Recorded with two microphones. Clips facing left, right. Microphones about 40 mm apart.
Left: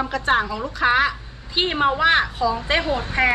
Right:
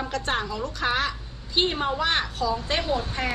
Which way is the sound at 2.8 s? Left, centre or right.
Left.